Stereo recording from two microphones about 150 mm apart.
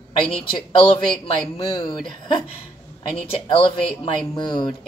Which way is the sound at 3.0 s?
40° left (ahead or behind).